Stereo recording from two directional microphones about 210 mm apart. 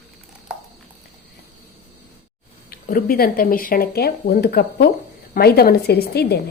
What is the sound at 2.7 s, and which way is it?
A woman's voice, 45° left (ahead or behind).